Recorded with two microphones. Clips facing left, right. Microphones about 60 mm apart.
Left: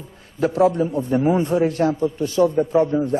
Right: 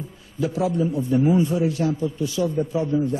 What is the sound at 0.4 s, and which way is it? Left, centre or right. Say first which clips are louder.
A man's voice: left 5 dB; left.